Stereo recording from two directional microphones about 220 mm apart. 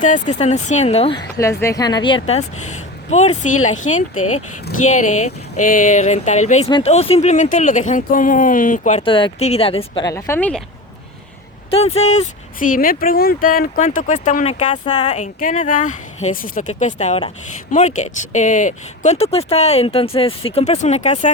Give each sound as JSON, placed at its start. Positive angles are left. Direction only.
{"t": 0.0, "sound": "speech", "side_deg": 35}
{"t": 1.4, "sound": "speech", "side_deg": 15}
{"t": 11.7, "sound": "speech", "side_deg": 30}